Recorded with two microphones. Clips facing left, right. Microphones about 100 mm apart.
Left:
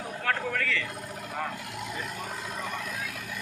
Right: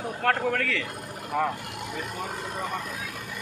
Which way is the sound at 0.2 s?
65° right (ahead or behind).